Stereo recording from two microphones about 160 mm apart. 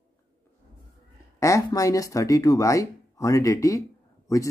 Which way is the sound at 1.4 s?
20° left (ahead or behind).